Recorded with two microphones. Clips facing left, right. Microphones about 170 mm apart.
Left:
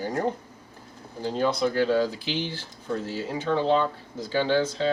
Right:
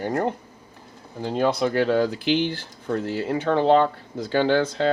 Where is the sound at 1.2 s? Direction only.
60° right (ahead or behind).